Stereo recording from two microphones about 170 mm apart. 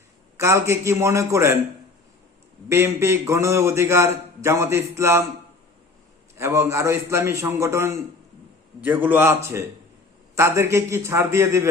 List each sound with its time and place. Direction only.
0.3 s a man's voice: 15° right (ahead or behind)
2.6 s a man's voice: 15° right (ahead or behind)
6.3 s a man's voice: 15° right (ahead or behind)